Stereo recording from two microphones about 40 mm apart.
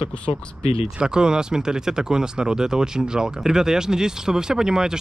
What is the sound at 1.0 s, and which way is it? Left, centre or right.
Speech, centre.